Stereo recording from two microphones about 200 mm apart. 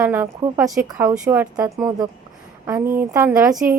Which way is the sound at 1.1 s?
5° right (ahead or behind).